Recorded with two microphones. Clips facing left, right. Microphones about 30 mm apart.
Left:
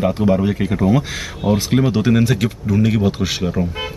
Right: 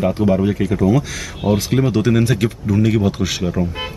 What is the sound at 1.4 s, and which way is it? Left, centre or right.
Speech, centre.